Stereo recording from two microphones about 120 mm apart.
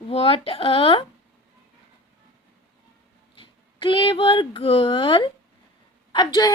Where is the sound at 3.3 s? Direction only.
45° left (ahead or behind).